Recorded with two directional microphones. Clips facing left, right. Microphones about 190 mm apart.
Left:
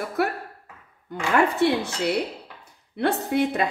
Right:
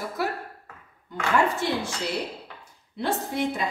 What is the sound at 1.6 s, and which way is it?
Speech, 65° left (ahead or behind).